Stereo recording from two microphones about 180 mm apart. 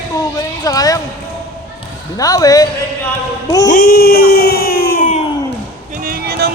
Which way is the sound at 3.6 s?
50° left (ahead or behind).